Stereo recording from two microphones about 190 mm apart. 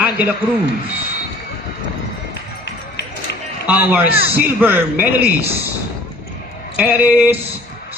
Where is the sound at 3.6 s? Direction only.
10° right (ahead or behind).